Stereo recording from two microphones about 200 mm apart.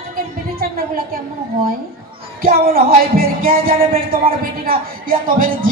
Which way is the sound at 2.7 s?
45° right (ahead or behind).